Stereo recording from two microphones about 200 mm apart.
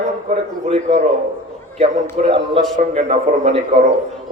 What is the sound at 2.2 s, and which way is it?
A man's voice, 35° right (ahead or behind).